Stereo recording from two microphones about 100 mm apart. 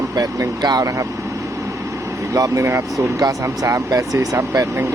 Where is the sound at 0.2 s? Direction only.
40° right (ahead or behind).